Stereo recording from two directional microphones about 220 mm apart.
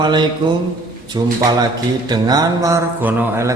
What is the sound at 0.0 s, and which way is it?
Speech, 20° right (ahead or behind).